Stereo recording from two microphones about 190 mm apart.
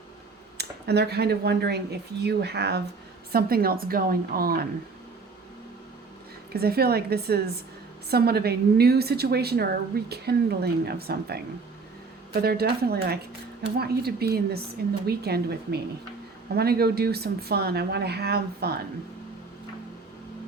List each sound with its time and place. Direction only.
0.5 s a woman's voice: 60° right (ahead or behind)
6.5 s a woman's voice: 55° right (ahead or behind)